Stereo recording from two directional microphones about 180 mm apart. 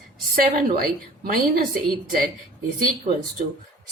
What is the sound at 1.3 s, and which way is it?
A woman's voice, 55° right (ahead or behind).